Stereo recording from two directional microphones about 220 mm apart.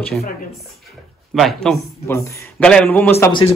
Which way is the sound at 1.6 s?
5° left (ahead or behind).